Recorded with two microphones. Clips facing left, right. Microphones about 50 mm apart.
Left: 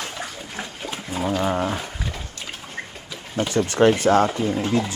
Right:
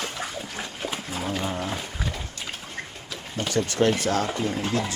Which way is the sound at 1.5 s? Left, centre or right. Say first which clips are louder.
Left 7 dB; left.